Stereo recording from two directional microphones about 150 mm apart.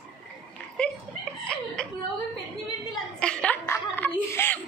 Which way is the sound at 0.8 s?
5° left (ahead or behind).